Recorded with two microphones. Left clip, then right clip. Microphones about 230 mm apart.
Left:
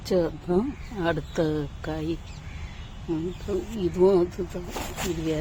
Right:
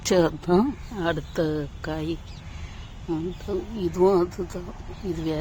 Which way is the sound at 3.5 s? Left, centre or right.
Centre.